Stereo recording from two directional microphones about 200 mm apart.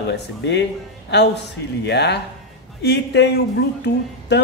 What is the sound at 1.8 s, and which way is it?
A man's voice, 55° left (ahead or behind).